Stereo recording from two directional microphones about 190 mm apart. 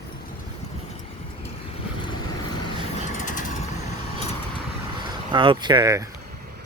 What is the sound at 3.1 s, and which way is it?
Vehicle, 40° left (ahead or behind).